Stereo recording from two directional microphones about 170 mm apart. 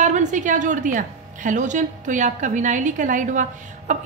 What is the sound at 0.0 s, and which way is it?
A woman's voice, 45° right (ahead or behind).